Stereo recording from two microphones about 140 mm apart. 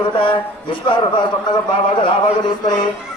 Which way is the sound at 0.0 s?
35° left (ahead or behind).